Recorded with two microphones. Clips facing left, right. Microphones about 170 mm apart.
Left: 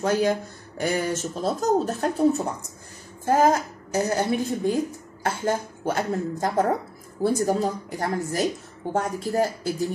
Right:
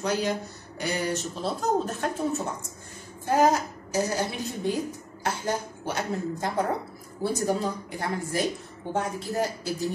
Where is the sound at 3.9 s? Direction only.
55° left (ahead or behind).